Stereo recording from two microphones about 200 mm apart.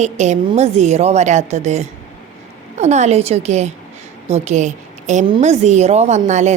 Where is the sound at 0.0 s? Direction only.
35° right (ahead or behind).